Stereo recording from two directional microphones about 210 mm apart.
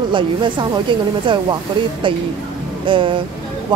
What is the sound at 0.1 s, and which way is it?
Speech, 20° right (ahead or behind).